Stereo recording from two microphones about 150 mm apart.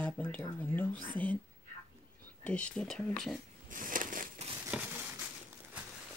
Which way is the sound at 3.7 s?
65° right (ahead or behind).